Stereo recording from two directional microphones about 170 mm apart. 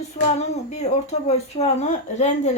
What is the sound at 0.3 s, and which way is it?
Speech, 40° left (ahead or behind).